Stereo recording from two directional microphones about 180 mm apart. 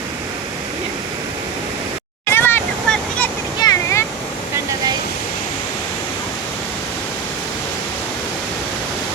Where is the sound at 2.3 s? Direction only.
10° left (ahead or behind).